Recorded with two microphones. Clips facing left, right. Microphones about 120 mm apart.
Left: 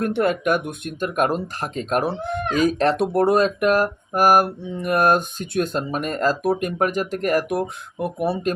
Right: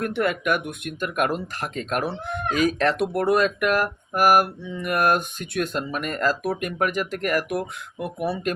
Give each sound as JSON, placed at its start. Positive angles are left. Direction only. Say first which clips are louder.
{"t": 0.0, "sound": "speech", "louder": "left 4 dB", "side_deg": 35}